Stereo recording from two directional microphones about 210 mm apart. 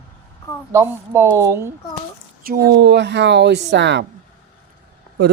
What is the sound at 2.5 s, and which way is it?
Speech, 50° right (ahead or behind).